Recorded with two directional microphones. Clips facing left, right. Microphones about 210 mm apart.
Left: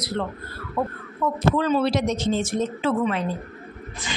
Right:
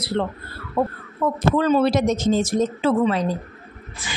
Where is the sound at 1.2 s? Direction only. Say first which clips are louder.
Right 2 dB; 45° right (ahead or behind).